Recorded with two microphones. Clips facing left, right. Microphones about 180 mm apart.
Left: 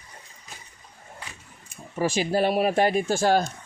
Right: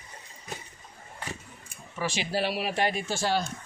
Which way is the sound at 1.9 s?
45° left (ahead or behind).